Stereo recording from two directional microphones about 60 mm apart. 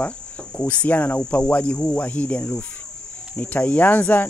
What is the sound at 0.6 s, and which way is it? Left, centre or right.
Speech, left.